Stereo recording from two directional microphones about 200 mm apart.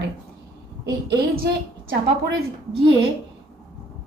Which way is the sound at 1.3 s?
50° right (ahead or behind).